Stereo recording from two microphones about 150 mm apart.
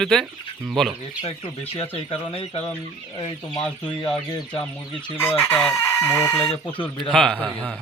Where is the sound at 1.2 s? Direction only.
40° left (ahead or behind).